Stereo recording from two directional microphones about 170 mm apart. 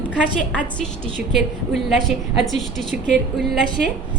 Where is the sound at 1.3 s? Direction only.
Centre (ahead or behind).